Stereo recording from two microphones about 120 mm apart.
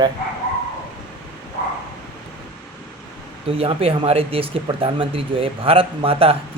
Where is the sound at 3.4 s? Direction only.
50° right (ahead or behind).